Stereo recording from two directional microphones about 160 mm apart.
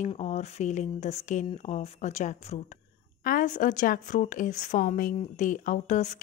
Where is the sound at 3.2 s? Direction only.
55° left (ahead or behind).